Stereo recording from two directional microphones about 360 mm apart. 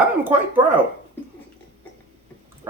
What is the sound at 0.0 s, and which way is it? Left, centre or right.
Speech, centre.